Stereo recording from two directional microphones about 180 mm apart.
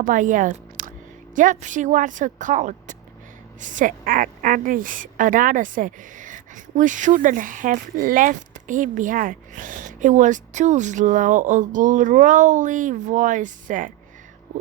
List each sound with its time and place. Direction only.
0.0 s speech: 45° right (ahead or behind)